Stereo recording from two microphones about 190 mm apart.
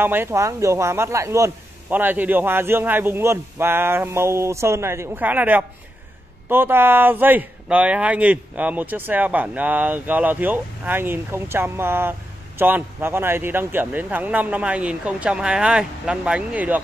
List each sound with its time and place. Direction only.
0.0 s speech: 10° right (ahead or behind)